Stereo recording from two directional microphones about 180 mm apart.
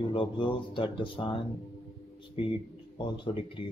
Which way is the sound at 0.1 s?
30° left (ahead or behind).